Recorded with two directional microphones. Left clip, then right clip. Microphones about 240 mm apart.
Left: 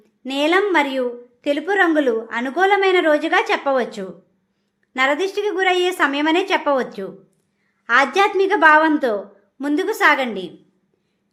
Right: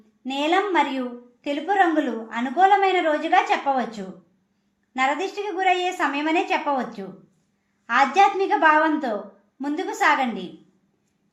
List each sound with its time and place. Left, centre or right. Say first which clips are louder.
0.3 s a woman's voice: left 4 dB; left